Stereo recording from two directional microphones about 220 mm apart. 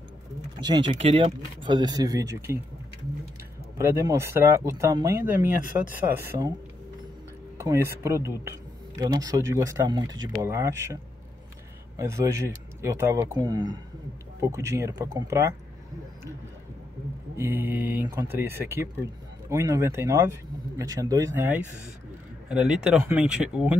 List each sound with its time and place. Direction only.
0.7 s speech: 25° right (ahead or behind)
3.7 s speech: 10° right (ahead or behind)
7.5 s speech: 15° right (ahead or behind)
12.0 s speech: 15° right (ahead or behind)
17.4 s speech: 10° right (ahead or behind)